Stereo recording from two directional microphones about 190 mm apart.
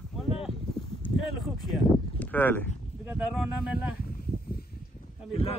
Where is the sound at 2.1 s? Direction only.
10° left (ahead or behind).